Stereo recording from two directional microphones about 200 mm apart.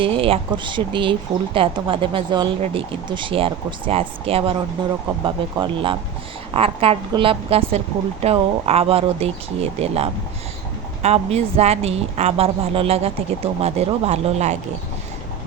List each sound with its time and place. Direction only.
0.0 s a woman's voice: 25° right (ahead or behind)